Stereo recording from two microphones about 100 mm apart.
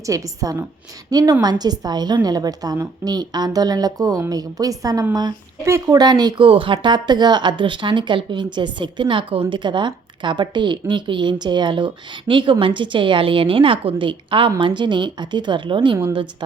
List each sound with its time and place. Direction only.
0.0 s a woman's voice: 35° right (ahead or behind)
6.4 s a woman's voice: 60° right (ahead or behind)